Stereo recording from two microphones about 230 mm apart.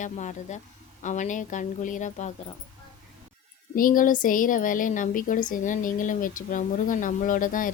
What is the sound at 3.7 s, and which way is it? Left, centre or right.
Speech, left.